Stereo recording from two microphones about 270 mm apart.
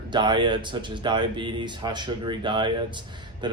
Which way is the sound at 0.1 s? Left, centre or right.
Centre.